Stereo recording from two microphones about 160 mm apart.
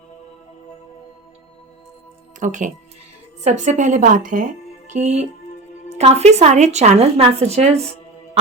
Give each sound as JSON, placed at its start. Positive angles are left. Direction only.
{"t": 2.4, "sound": "speech", "side_deg": -50}
{"t": 4.9, "sound": "speech", "side_deg": -45}